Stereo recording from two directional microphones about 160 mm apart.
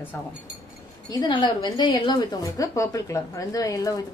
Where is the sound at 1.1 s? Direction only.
25° left (ahead or behind).